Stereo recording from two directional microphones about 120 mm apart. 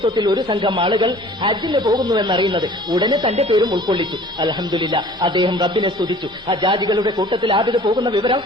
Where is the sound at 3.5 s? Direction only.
40° right (ahead or behind).